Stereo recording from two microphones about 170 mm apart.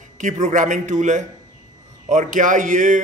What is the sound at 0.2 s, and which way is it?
A man's voice, 45° right (ahead or behind).